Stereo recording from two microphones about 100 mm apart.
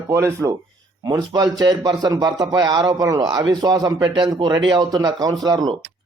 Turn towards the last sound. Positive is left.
turn(degrees=-40)  # may be behind; listen again after turning